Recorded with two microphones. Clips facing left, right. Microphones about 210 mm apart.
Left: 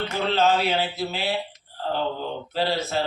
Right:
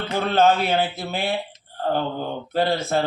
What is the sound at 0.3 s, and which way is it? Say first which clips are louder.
A man's voice: right 3 dB; 50° right (ahead or behind).